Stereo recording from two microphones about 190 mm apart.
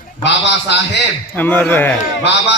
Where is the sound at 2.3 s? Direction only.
65° left (ahead or behind).